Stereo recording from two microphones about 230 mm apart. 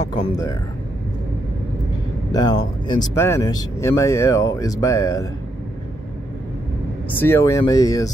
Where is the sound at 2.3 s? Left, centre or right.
Centre.